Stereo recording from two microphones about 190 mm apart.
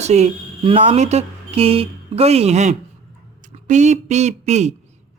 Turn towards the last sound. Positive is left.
turn(degrees=-35)  # may be behind; listen again after turning